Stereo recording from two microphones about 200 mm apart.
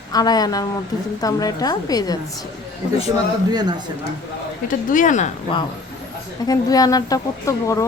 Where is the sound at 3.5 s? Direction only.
20° right (ahead or behind).